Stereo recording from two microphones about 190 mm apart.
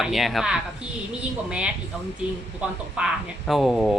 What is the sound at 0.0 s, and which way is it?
Speech, centre (ahead or behind).